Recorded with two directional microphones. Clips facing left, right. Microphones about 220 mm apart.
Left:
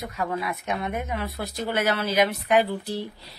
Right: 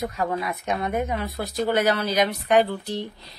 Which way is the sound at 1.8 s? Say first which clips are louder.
Left 2 dB; 5° left (ahead or behind).